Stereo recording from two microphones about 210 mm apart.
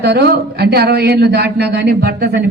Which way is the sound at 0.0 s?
50° right (ahead or behind).